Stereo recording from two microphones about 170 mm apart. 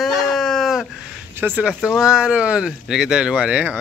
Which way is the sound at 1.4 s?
10° right (ahead or behind).